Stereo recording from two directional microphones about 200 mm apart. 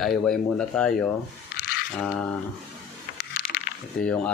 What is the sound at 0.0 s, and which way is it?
Speech, 5° left (ahead or behind).